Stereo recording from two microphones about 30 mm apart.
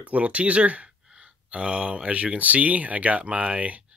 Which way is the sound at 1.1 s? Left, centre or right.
Right.